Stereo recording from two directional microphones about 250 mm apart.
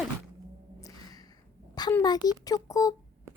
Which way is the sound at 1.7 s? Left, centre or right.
Centre.